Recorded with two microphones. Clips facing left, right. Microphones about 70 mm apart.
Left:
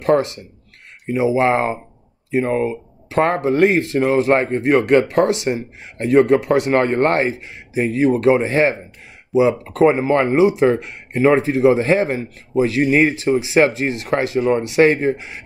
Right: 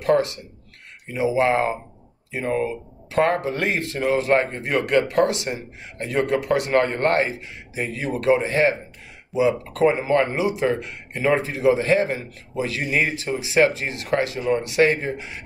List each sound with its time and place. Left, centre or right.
0.0 s speech: left